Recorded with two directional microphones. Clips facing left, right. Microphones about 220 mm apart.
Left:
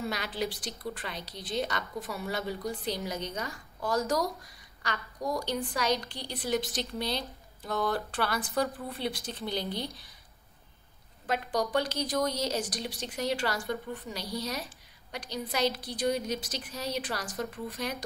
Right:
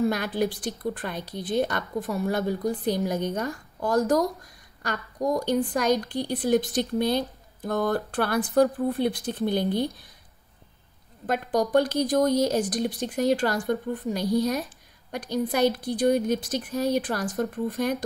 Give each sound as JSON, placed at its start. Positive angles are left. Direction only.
{"t": 0.0, "sound": "a woman's voice", "side_deg": -50}
{"t": 11.2, "sound": "a woman's voice", "side_deg": -50}